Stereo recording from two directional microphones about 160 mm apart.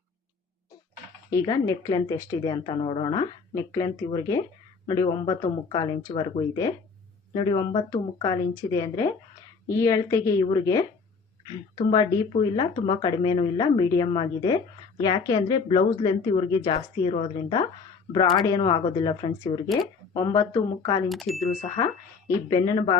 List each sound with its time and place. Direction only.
1.3 s a woman's voice: 20° left (ahead or behind)
21.1 s speech: centre (ahead or behind)
21.3 s speech: 45° left (ahead or behind)
22.4 s a woman's voice: 25° left (ahead or behind)